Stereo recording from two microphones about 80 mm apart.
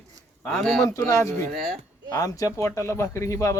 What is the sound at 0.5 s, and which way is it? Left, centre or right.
Speech, centre.